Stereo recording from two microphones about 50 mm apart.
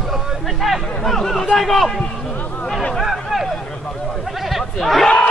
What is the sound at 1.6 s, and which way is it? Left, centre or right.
Speech, centre.